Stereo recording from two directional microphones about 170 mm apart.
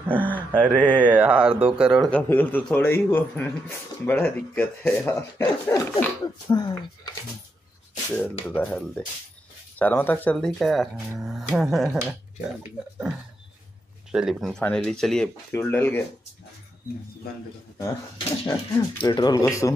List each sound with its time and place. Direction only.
0.0 s mantra: 10° right (ahead or behind)
0.6 s speech: 5° left (ahead or behind)
1.0 s speech: 10° right (ahead or behind)
2.0 s speech: 10° left (ahead or behind)
8.1 s speech: 10° left (ahead or behind)
14.1 s speech: centre (ahead or behind)
18.5 s speech: 20° left (ahead or behind)